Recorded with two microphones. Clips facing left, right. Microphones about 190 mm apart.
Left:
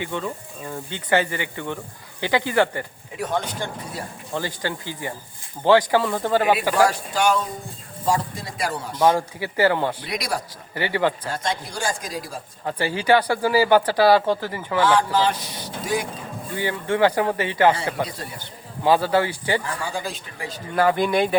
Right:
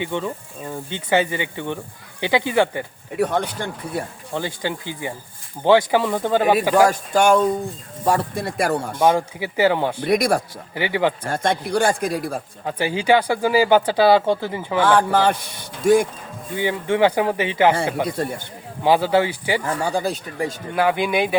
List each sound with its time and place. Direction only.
0.0 s speech: 20° right (ahead or behind)
3.9 s speech: 60° right (ahead or behind)
4.4 s speech: 15° right (ahead or behind)
7.1 s speech: 50° right (ahead or behind)
9.0 s speech: 20° right (ahead or behind)
10.0 s speech: 50° right (ahead or behind)
10.8 s speech: 15° right (ahead or behind)
11.3 s speech: 60° right (ahead or behind)
12.6 s speech: 15° right (ahead or behind)
14.9 s speech: 55° right (ahead or behind)
16.6 s speech: 20° right (ahead or behind)
18.8 s speech: 15° right (ahead or behind)
19.8 s speech: 40° right (ahead or behind)
20.7 s speech: 10° right (ahead or behind)